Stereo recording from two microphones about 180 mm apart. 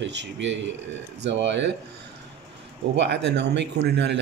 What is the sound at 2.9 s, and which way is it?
Speech, 75° right (ahead or behind).